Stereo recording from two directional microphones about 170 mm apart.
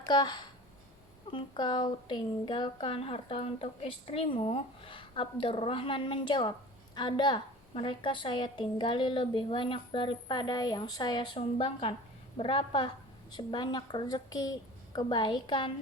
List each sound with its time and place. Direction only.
0.1 s a woman's voice: 25° left (ahead or behind)